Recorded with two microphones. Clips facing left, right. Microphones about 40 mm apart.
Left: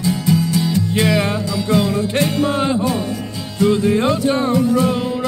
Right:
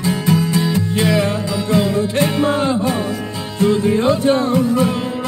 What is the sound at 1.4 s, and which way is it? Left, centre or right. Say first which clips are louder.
Music: even; centre.